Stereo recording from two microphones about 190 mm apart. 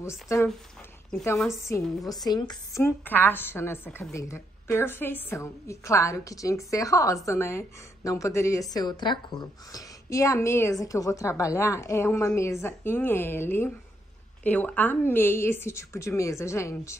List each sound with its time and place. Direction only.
0.0 s a woman's voice: 15° left (ahead or behind)
2.2 s a woman's voice: 20° left (ahead or behind)